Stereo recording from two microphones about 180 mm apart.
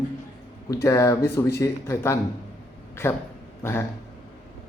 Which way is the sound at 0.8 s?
15° left (ahead or behind).